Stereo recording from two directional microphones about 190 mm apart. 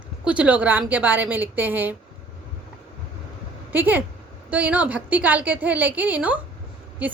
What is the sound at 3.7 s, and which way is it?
A woman's voice, 10° right (ahead or behind).